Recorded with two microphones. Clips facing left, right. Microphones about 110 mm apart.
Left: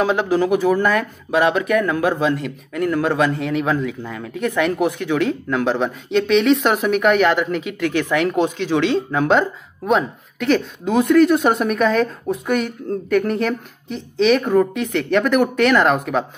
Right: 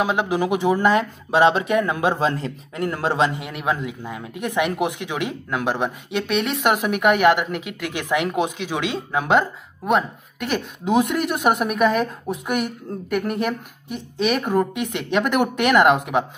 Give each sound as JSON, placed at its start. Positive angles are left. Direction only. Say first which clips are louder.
{"t": 0.0, "sound": "speech", "louder": "left 3 dB", "side_deg": -15}
{"t": 3.3, "sound": "speech", "louder": "left 5 dB", "side_deg": -10}